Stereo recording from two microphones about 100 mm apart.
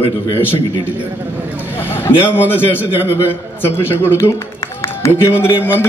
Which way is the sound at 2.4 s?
20° left (ahead or behind).